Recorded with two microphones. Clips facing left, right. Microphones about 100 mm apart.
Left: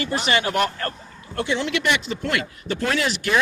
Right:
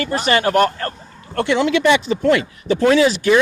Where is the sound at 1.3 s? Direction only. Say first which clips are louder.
Right 6 dB; 70° right (ahead or behind).